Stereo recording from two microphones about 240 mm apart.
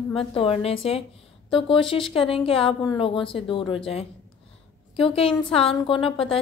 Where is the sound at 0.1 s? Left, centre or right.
Left.